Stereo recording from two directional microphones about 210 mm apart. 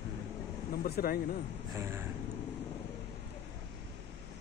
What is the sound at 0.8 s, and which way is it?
Speech, 45° left (ahead or behind).